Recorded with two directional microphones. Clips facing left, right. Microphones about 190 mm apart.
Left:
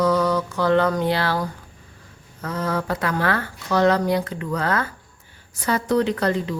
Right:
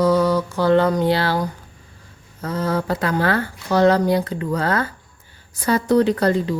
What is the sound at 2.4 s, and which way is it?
Speech, 30° right (ahead or behind).